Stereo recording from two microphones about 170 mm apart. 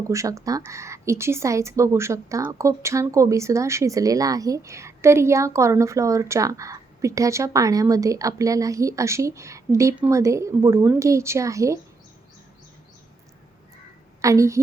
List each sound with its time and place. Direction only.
0.1 s speech: 20° right (ahead or behind)
14.2 s a woman's voice: 20° right (ahead or behind)